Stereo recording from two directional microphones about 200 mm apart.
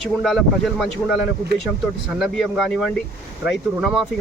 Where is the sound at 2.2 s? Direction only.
Centre (ahead or behind).